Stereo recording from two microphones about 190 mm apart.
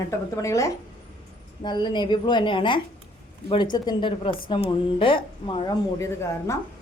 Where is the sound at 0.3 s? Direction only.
15° left (ahead or behind).